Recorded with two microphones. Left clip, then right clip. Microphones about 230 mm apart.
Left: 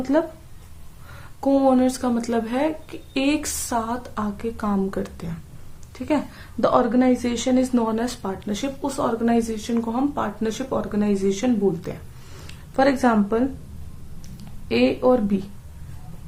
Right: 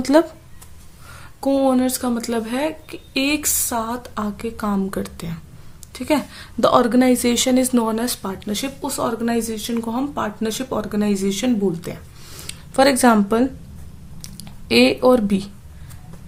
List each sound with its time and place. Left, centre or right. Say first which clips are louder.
0.0 s a woman's voice: right 6 dB; right
1.4 s a woman's voice: even; right
14.2 s a sound: right 7 dB; right